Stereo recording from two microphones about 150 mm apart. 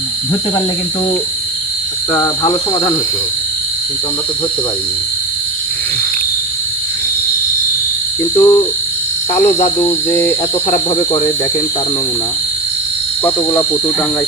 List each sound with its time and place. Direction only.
2.1 s cricket: 25° left (ahead or behind)
8.2 s cricket: 20° left (ahead or behind)
13.2 s cricket: 20° left (ahead or behind)